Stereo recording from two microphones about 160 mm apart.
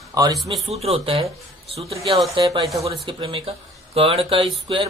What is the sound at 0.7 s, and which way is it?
Speech, 40° right (ahead or behind).